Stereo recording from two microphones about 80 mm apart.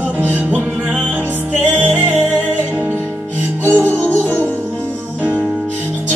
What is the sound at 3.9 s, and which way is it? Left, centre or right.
Music, centre.